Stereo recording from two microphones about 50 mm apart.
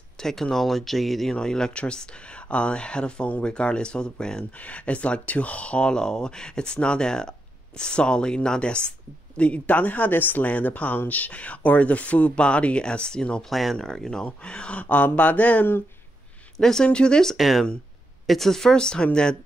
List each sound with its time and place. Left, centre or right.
0.2 s speech: centre
1.3 s speech: centre
4.6 s speech: left
13.5 s speech: centre
13.7 s speech: centre; by 15.6 s left
16.5 s speech: centre
17.4 s speech: centre